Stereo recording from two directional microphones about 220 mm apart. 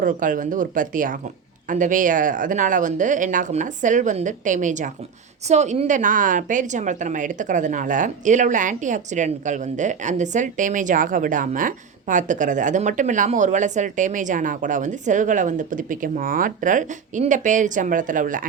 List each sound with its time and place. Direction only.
0.0 s a woman's voice: 35° right (ahead or behind)